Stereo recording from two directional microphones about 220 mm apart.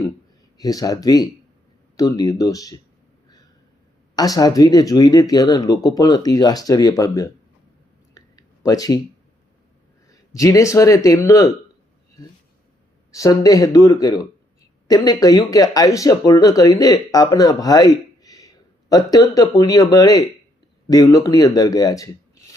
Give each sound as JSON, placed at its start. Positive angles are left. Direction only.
{"t": 0.6, "sound": "speech", "side_deg": 15}
{"t": 4.1, "sound": "speech", "side_deg": 15}
{"t": 8.1, "sound": "a sound", "side_deg": 15}
{"t": 10.1, "sound": "speech", "side_deg": 15}
{"t": 13.1, "sound": "speech", "side_deg": 15}